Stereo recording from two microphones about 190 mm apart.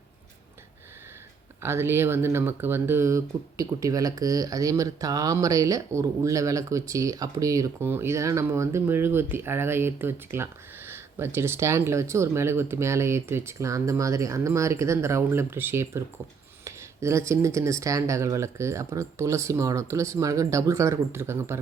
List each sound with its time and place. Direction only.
1.6 s speech: 15° right (ahead or behind)